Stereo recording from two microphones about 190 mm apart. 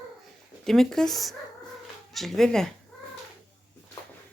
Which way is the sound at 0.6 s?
Centre (ahead or behind).